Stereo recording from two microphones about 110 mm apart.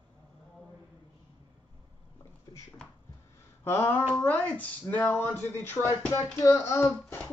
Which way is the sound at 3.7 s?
20° left (ahead or behind).